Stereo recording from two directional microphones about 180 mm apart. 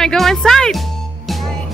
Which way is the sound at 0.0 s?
5° left (ahead or behind).